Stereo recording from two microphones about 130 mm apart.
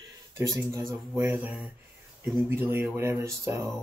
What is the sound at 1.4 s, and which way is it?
Speech, 10° right (ahead or behind).